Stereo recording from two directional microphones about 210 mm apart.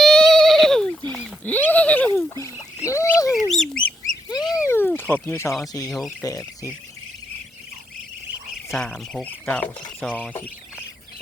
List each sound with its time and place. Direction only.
0.0 s a sound: centre (ahead or behind)
3.3 s bird: centre (ahead or behind)
4.5 s a sound: 10° left (ahead or behind)
5.9 s speech: centre (ahead or behind)
6.2 s speech: 15° left (ahead or behind)
8.7 s speech: centre (ahead or behind)